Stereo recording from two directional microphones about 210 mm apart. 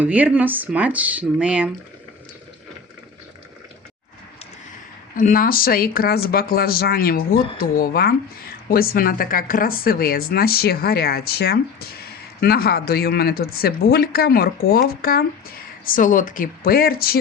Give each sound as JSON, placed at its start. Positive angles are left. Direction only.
{"t": 0.0, "sound": "speech", "side_deg": -10}
{"t": 5.1, "sound": "speech", "side_deg": 40}